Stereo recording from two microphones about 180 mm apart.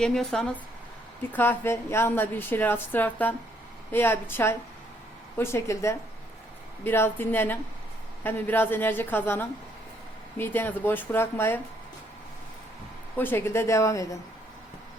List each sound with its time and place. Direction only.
0.0 s a woman's voice: centre (ahead or behind)
13.1 s a woman's voice: 10° left (ahead or behind)